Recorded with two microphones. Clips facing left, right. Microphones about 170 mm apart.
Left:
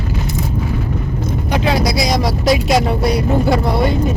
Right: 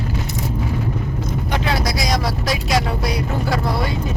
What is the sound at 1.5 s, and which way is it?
Vehicle, 15° left (ahead or behind).